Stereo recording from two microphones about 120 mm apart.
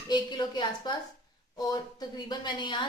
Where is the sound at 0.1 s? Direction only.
40° left (ahead or behind).